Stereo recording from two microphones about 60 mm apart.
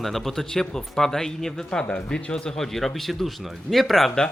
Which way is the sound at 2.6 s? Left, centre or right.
Centre.